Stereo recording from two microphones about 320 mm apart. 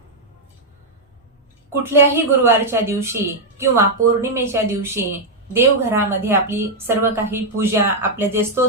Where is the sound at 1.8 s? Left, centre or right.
Centre.